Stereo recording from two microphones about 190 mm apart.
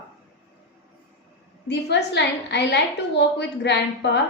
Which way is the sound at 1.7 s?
65° left (ahead or behind).